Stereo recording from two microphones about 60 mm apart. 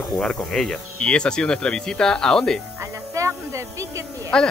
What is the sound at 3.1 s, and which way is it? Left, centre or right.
Music, right.